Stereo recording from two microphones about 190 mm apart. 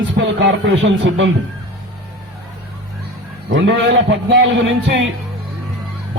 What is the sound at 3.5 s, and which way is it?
Speech, 80° right.